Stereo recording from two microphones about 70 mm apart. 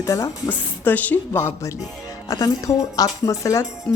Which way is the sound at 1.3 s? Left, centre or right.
Left.